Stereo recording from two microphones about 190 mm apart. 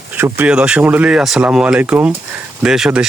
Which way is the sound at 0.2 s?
10° right (ahead or behind).